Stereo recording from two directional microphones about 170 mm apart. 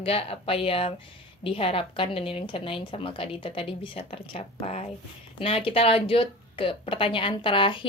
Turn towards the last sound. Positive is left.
turn(degrees=30)  # may be behind; listen again after turning